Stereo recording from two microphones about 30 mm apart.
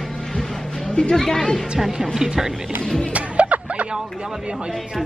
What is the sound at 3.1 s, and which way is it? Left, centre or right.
Music, right.